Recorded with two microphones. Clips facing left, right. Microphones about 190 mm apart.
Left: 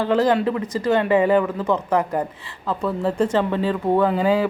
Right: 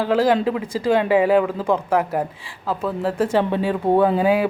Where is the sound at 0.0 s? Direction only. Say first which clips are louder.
Right 1 dB; 10° right (ahead or behind).